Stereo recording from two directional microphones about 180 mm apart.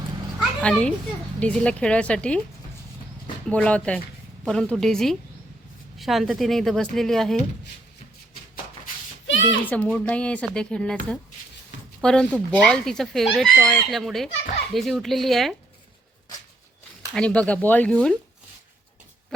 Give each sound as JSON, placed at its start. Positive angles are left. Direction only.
{"t": 0.3, "sound": "cat", "side_deg": 5}
{"t": 1.4, "sound": "speech", "side_deg": 5}
{"t": 3.5, "sound": "speech", "side_deg": 5}
{"t": 9.2, "sound": "a sound", "side_deg": 90}
{"t": 9.6, "sound": "speech", "side_deg": 10}
{"t": 17.2, "sound": "speech", "side_deg": 5}